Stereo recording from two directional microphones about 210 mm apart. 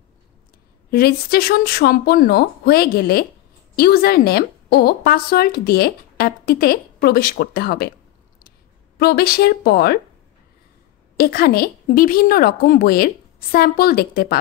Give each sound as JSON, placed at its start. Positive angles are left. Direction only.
{"t": 0.9, "sound": "a woman's voice", "side_deg": 45}
{"t": 11.1, "sound": "a woman's voice", "side_deg": 45}